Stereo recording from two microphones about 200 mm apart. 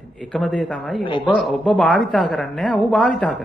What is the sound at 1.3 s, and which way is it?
Speech, centre (ahead or behind).